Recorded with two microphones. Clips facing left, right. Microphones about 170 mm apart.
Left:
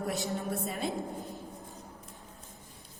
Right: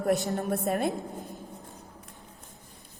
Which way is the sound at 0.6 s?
55° right (ahead or behind).